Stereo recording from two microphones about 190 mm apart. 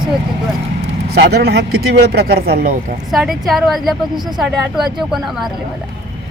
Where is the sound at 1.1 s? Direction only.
60° right (ahead or behind).